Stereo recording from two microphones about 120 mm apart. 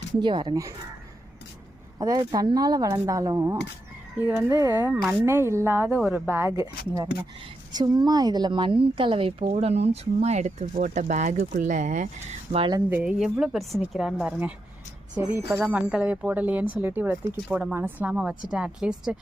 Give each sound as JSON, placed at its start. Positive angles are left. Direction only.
{"t": 0.2, "sound": "speech", "side_deg": -40}
{"t": 2.0, "sound": "a woman's voice", "side_deg": -30}
{"t": 12.9, "sound": "speech", "side_deg": -10}
{"t": 18.1, "sound": "speech", "side_deg": -5}